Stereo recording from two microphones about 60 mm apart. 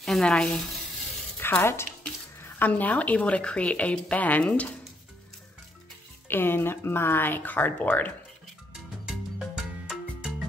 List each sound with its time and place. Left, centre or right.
0.0 s speech: centre
1.6 s speech: left
2.4 s a woman's voice: left
6.2 s speech: left
9.6 s music: centre